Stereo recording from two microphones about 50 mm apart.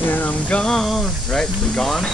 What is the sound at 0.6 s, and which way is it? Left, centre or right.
Speech, centre.